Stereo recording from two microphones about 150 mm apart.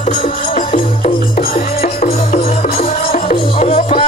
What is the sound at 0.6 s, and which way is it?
Music, 55° left (ahead or behind).